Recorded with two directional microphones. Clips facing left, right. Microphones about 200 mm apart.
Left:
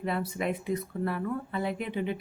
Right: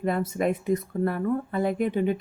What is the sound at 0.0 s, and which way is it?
Speech, 45° right (ahead or behind).